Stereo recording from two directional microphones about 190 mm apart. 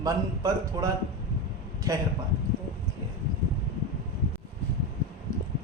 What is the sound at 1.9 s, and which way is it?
Speech, 15° right (ahead or behind).